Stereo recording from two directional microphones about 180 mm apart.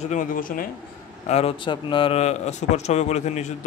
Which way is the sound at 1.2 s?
35° left (ahead or behind).